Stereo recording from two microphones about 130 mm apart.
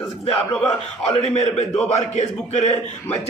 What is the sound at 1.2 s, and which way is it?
A man's voice, 55° left (ahead or behind).